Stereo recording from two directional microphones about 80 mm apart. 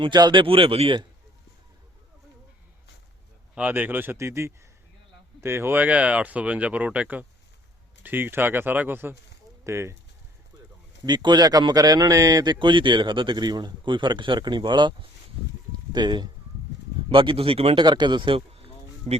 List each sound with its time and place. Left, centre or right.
0.0 s speech: right
3.5 s speech: right
9.6 s speech: right
11.0 s a man's voice: right
17.1 s speech: right
17.7 s a man's voice: right